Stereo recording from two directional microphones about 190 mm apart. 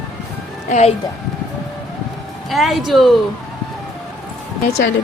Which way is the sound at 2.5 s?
Centre (ahead or behind).